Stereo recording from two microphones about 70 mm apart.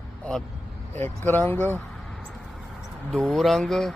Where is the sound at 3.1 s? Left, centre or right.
Centre.